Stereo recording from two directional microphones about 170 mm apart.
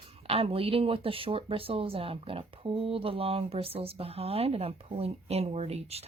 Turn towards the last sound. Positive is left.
turn(degrees=-35)  # may be behind; listen again after turning